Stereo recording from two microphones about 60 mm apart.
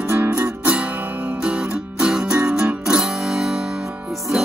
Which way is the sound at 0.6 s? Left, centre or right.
Right.